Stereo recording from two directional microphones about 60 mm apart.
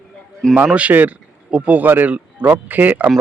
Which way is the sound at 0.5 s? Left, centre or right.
Right.